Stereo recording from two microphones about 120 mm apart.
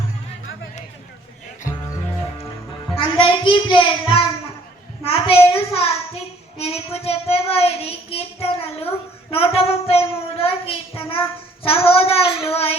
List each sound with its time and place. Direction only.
2.9 s a child's voice: 50° left (ahead or behind)